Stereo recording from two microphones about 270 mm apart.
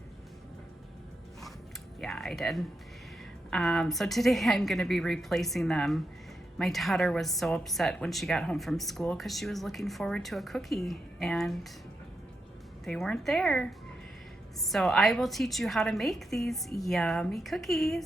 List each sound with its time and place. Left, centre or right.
2.0 s a woman's voice: centre
12.8 s a woman's voice: centre